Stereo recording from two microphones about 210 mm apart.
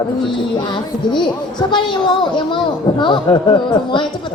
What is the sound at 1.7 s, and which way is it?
A woman's voice, 20° left (ahead or behind).